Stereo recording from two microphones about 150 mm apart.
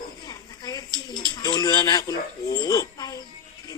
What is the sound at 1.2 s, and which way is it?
A child's voice, 25° left (ahead or behind).